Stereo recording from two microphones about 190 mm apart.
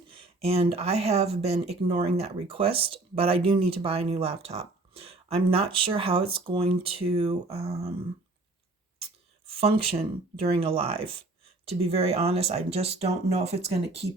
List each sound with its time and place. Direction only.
0.1 s speech: 30° right (ahead or behind)
9.6 s speech: 30° right (ahead or behind)